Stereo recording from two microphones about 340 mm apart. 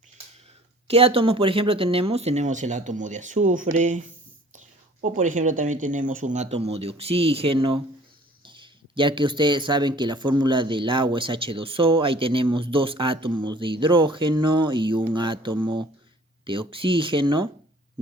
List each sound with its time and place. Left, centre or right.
0.9 s speech: centre